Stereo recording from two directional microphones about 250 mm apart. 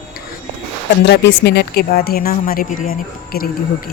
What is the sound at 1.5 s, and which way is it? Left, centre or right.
Speech, left.